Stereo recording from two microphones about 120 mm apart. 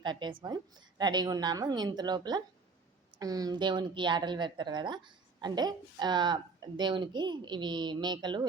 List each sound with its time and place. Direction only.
0.0 s a woman's voice: 40° right (ahead or behind)